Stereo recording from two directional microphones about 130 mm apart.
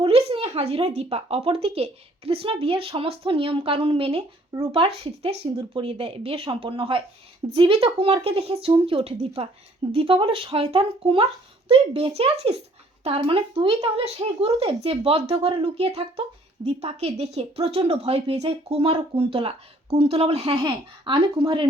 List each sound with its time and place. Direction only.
0.0 s speech: 45° right (ahead or behind)